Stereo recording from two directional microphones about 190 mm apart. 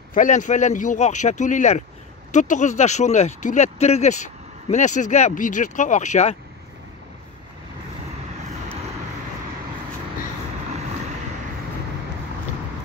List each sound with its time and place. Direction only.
0.1 s speech: 45° left (ahead or behind)